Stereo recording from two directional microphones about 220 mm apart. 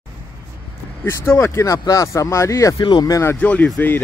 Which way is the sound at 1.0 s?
10° left (ahead or behind).